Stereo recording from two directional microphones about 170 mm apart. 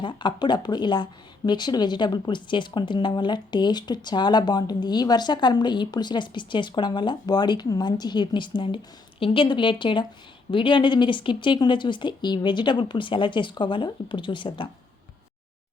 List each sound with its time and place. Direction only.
0.0 s speech: 25° left (ahead or behind)